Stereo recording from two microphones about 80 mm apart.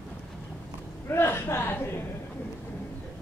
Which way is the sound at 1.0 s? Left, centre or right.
Left.